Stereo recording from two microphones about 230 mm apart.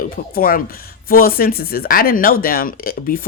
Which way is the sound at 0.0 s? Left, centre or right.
Left.